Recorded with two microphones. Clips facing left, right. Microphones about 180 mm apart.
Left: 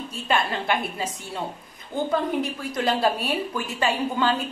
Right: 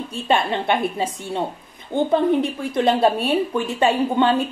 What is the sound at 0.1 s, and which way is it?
Speech, 25° right (ahead or behind).